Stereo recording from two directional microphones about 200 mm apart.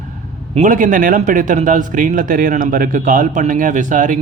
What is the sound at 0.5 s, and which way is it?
Speech, 40° right (ahead or behind).